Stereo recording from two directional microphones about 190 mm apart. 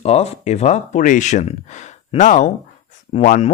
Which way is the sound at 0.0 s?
35° left (ahead or behind).